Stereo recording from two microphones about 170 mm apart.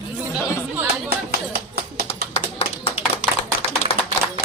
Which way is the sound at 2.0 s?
35° left (ahead or behind).